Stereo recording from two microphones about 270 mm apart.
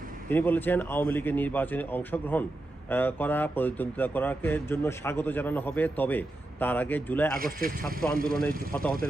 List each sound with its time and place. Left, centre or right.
0.3 s speech: centre
7.3 s speech: right
8.7 s speech: centre